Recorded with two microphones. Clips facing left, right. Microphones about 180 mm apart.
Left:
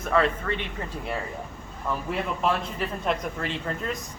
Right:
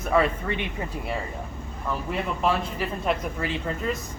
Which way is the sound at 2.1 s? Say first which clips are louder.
Right 1 dB; centre (ahead or behind).